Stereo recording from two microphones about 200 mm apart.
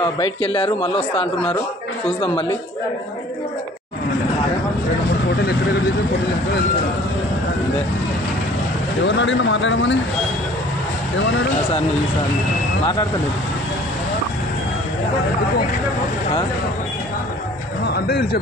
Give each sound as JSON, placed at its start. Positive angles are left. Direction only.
{"t": 0.2, "sound": "speech", "side_deg": 30}
{"t": 9.0, "sound": "speech", "side_deg": 65}
{"t": 17.8, "sound": "speech", "side_deg": 55}